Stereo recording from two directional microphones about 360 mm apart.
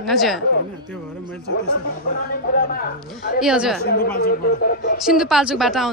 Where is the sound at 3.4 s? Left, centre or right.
Centre.